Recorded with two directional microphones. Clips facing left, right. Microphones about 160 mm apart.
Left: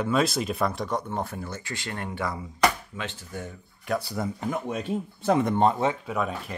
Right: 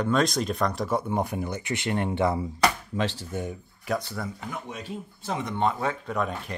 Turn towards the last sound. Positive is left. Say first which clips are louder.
# even
turn(degrees=5)  # may be behind; listen again after turning